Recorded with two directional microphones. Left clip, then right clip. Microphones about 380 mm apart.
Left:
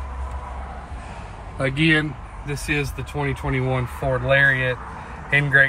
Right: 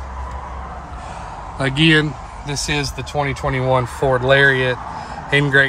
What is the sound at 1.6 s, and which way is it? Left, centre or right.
Speech, centre.